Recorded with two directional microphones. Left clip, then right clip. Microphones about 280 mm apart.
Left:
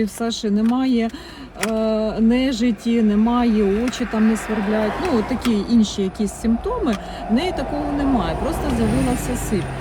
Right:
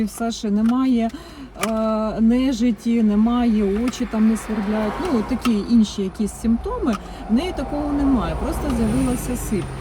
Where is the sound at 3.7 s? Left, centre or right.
Left.